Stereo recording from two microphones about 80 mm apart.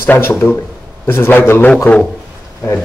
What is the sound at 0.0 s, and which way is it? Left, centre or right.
A man's voice, left.